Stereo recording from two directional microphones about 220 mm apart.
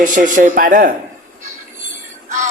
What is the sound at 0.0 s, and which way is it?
Speech, 35° right (ahead or behind).